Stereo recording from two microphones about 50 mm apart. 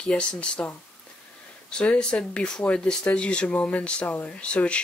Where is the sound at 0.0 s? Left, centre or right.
Centre.